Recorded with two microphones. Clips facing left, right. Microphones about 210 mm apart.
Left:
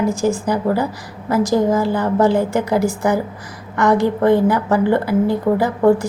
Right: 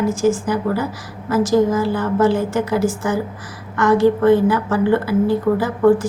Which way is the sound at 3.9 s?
15° left (ahead or behind).